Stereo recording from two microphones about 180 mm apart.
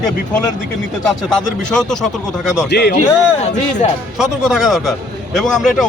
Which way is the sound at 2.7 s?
65° left (ahead or behind).